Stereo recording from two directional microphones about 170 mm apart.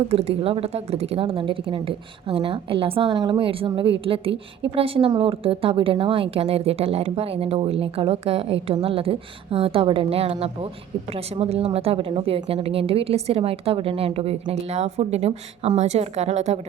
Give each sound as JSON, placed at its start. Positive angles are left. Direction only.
{"t": 0.1, "sound": "a woman's voice", "side_deg": -35}